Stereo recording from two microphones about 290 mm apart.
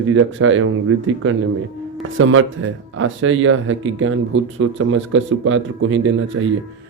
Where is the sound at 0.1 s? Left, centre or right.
Right.